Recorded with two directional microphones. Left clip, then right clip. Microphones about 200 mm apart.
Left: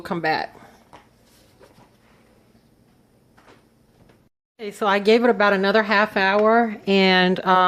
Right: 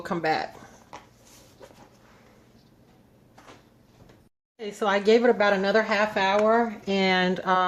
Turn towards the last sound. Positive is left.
turn(degrees=35)  # may be behind; listen again after turning